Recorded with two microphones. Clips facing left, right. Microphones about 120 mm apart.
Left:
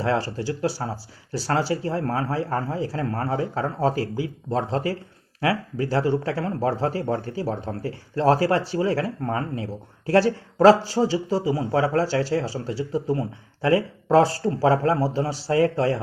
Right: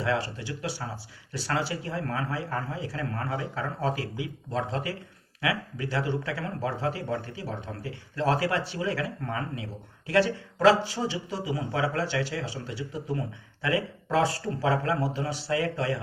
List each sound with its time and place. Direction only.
0.0 s speech: 35° left (ahead or behind)